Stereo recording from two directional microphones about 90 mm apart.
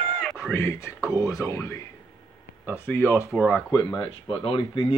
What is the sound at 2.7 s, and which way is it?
Speech, 20° left (ahead or behind).